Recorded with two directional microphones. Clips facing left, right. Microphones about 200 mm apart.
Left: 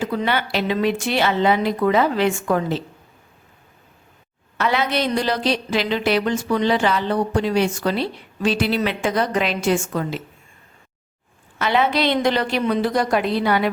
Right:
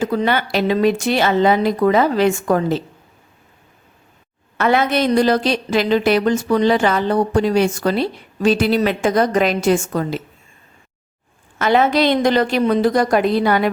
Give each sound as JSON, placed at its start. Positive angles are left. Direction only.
{"t": 0.0, "sound": "a woman's voice", "side_deg": -45}
{"t": 4.5, "sound": "a woman's voice", "side_deg": -50}
{"t": 11.6, "sound": "a woman's voice", "side_deg": -45}